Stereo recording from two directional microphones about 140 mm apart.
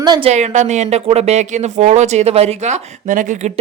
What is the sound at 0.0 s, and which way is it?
Speech, 30° right (ahead or behind).